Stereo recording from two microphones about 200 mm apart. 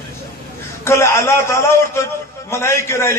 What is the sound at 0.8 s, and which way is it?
A man's voice, 15° left (ahead or behind).